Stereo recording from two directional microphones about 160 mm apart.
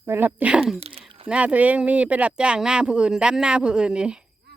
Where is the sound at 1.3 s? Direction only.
10° right (ahead or behind).